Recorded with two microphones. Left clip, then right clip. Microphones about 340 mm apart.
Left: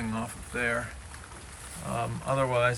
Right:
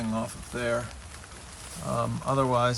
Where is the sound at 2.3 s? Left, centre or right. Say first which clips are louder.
Right 1 dB; left.